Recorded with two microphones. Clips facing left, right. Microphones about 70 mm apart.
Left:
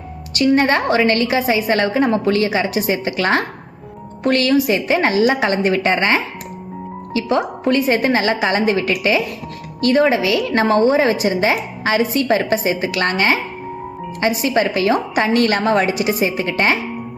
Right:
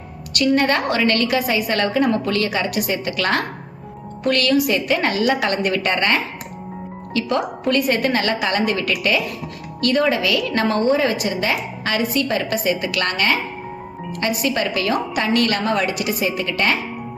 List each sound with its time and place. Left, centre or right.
0.3 s a woman's voice: left
1.4 s a woman's voice: left
10.8 s a woman's voice: left
11.3 s a woman's voice: left